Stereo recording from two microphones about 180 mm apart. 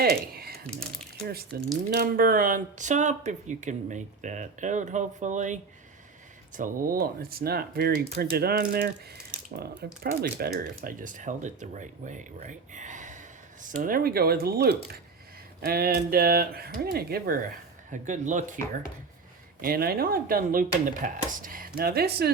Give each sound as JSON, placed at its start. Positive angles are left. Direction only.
{"t": 0.0, "sound": "a sound", "side_deg": -60}
{"t": 1.5, "sound": "speech", "side_deg": -60}
{"t": 6.6, "sound": "speech", "side_deg": -50}
{"t": 17.9, "sound": "speech", "side_deg": -40}
{"t": 19.6, "sound": "speech", "side_deg": -60}
{"t": 21.8, "sound": "speech", "side_deg": -60}